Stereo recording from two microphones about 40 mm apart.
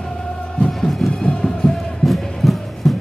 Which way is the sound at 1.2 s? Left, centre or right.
Centre.